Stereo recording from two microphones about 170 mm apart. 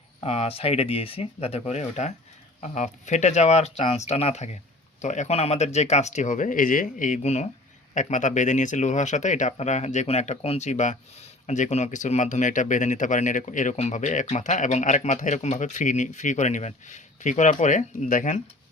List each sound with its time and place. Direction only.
0.2 s speech: 35° left (ahead or behind)